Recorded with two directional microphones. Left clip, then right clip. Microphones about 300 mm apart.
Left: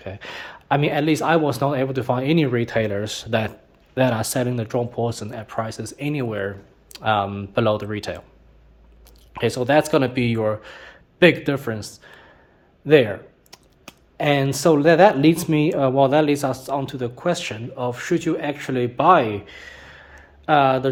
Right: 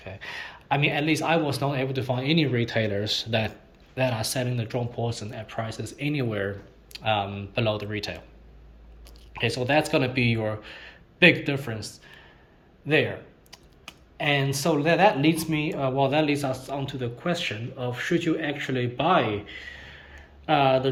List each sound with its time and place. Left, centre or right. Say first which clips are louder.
0.0 s speech: left 3 dB; left
9.3 s speech: left 5 dB; left
12.0 s a sound: left 4 dB; left
12.9 s speech: left 8 dB; left
14.2 s speech: left 5 dB; left